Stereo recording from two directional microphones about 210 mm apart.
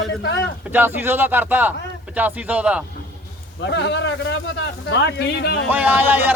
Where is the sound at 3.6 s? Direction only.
55° left (ahead or behind).